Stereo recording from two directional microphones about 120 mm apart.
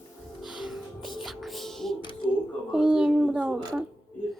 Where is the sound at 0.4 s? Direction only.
Centre (ahead or behind).